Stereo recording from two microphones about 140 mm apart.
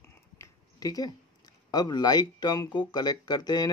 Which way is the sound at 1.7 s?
30° left (ahead or behind).